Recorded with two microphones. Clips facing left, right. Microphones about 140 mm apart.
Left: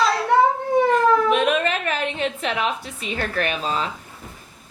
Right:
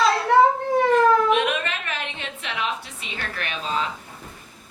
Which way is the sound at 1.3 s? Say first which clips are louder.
Left 3 dB; 40° left (ahead or behind).